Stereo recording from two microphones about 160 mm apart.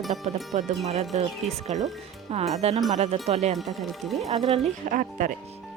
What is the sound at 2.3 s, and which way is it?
Speech, 40° right (ahead or behind).